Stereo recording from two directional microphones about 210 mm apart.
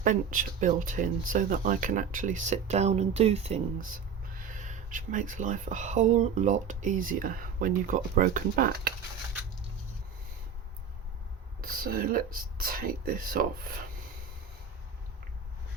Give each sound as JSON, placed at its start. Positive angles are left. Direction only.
{"t": 0.0, "sound": "speech", "side_deg": -40}
{"t": 11.6, "sound": "speech", "side_deg": -45}